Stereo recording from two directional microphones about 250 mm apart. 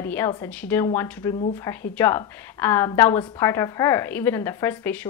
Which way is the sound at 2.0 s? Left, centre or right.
Centre.